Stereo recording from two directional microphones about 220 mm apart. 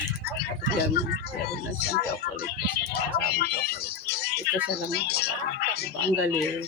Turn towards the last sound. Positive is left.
turn(degrees=45)  # may be behind; listen again after turning